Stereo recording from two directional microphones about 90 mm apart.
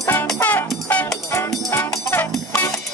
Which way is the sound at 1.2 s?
30° left (ahead or behind).